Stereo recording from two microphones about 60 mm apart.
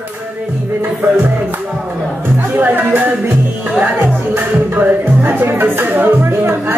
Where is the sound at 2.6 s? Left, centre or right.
Right.